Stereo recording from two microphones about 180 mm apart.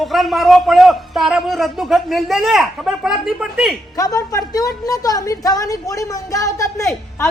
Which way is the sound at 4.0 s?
20° left (ahead or behind).